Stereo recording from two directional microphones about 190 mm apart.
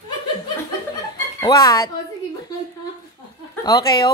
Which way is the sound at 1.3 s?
20° left (ahead or behind).